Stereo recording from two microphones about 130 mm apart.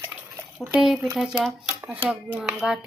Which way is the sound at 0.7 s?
5° right (ahead or behind).